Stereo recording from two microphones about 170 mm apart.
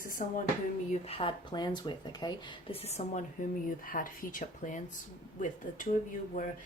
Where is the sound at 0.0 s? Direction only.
55° left (ahead or behind).